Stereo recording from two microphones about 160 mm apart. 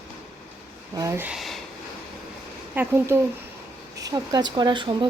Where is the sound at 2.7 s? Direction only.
15° right (ahead or behind); by 5.0 s 30° right (ahead or behind).